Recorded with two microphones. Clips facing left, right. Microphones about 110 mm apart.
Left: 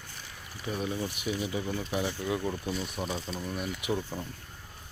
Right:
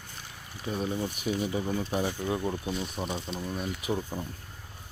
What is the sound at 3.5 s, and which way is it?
Speech, 35° right (ahead or behind).